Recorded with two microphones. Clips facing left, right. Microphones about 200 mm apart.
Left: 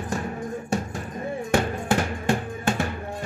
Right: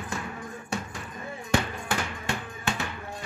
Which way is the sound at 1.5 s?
50° left (ahead or behind).